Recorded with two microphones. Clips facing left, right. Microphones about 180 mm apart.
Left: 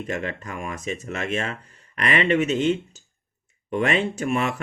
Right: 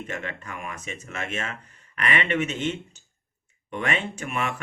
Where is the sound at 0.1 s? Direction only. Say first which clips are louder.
Left 5 dB; 35° left (ahead or behind).